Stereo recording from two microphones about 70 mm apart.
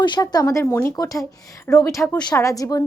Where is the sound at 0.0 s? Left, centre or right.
Left.